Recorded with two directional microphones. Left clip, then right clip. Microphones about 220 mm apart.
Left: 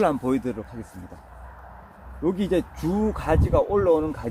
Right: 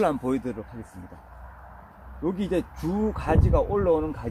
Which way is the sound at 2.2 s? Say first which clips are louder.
Left 3 dB; 10° right (ahead or behind).